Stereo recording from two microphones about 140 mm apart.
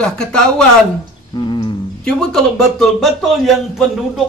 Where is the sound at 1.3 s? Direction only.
35° left (ahead or behind).